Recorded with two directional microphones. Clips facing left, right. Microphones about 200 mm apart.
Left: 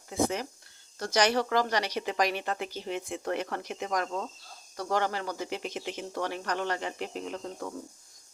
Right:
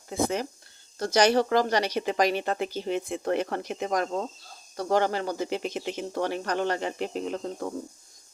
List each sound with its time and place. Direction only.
0.1 s speech: 30° right (ahead or behind)